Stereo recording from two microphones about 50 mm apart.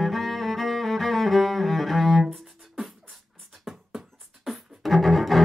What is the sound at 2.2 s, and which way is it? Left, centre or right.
Music, centre.